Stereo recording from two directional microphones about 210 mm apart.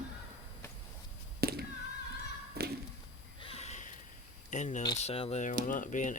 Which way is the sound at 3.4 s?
30° left (ahead or behind).